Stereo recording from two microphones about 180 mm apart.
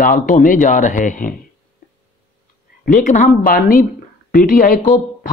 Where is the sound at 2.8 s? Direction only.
45° left (ahead or behind).